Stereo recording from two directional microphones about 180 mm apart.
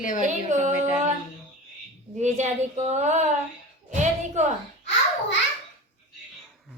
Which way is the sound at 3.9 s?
40° right (ahead or behind).